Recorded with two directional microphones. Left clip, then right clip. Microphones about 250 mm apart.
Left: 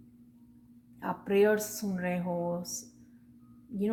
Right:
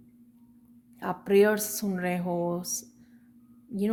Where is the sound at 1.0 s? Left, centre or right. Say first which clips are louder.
Right 4 dB; right.